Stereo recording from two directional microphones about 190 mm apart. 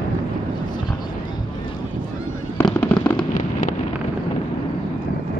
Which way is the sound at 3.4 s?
45° left (ahead or behind).